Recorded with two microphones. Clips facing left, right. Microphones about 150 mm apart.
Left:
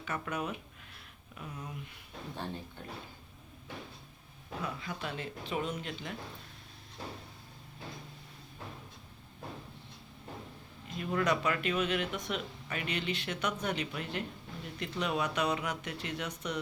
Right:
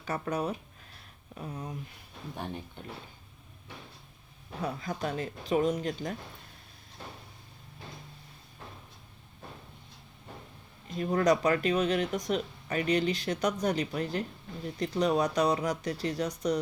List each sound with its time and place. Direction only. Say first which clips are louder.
0.0 s speech: right 5 dB; 35° right (ahead or behind)
2.3 s speech: right 3 dB; 15° right (ahead or behind)
4.6 s speech: right 6 dB; 40° right (ahead or behind)
10.8 s speech: right 6 dB; 40° right (ahead or behind)